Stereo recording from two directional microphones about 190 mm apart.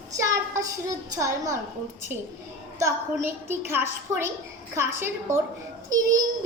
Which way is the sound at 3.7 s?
10° right (ahead or behind).